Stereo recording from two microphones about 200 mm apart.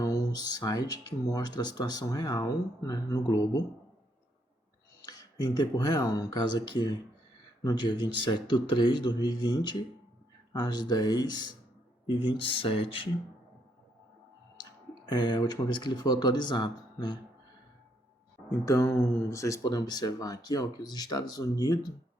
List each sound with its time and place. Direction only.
0.0 s speech: 15° left (ahead or behind)
5.0 s speech: 20° left (ahead or behind)
15.1 s speech: 20° left (ahead or behind)
18.6 s speech: 15° left (ahead or behind)